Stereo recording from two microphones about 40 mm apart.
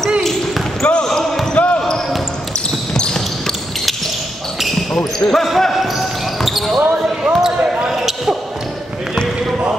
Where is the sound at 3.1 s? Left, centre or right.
Centre.